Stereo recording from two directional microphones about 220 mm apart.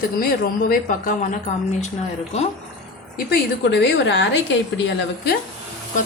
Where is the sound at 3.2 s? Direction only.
50° left (ahead or behind).